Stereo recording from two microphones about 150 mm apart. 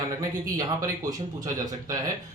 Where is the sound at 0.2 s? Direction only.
25° right (ahead or behind).